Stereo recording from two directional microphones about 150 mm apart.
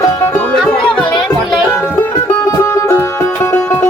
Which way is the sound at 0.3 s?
5° left (ahead or behind).